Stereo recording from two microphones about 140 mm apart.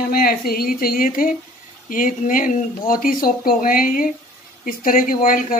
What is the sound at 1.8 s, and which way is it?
Speech, 70° left (ahead or behind).